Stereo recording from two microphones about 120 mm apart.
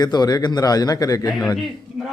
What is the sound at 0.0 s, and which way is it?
A man's voice, 35° left (ahead or behind).